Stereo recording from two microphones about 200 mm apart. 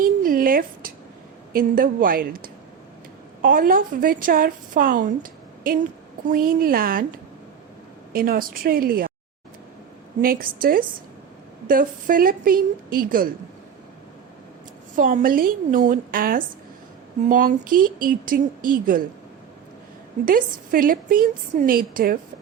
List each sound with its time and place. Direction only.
0.0 s a sound: 45° right (ahead or behind)
1.5 s a woman's voice: 45° right (ahead or behind)
8.1 s a woman's voice: 45° right (ahead or behind)
10.2 s a woman's voice: 45° right (ahead or behind)
14.9 s a woman's voice: 40° right (ahead or behind)
20.2 s a woman's voice: 45° right (ahead or behind)